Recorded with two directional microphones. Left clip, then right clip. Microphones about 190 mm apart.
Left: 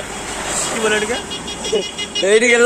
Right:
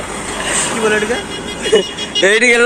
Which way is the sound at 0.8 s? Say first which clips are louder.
Right 2 dB; 30° left (ahead or behind).